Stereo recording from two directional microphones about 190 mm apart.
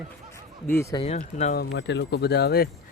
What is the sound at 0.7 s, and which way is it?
Speech, 15° left (ahead or behind).